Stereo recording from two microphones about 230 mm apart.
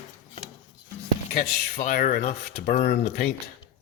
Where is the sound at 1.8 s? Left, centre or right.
Left.